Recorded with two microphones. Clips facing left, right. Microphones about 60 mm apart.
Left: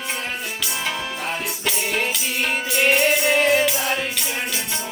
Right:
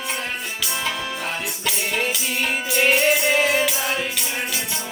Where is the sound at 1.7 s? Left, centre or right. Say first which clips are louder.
Even; centre.